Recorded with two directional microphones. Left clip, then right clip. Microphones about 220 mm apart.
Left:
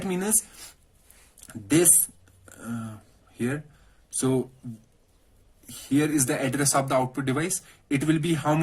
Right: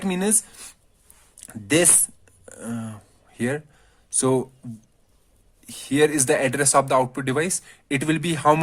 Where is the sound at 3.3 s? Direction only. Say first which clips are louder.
Right 4 dB; 45° right (ahead or behind).